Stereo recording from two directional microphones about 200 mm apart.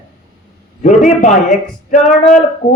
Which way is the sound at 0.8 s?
40° left (ahead or behind).